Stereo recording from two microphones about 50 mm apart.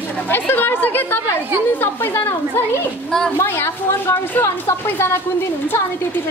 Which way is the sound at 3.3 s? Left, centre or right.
Left.